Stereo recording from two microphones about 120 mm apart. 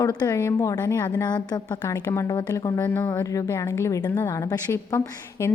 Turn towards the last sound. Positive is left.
turn(degrees=20)  # may be behind; listen again after turning